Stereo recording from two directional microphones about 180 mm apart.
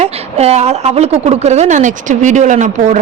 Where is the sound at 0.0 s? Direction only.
35° right (ahead or behind).